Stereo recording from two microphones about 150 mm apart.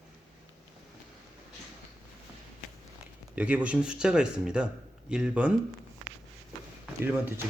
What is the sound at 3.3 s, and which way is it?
Speech, 10° right (ahead or behind).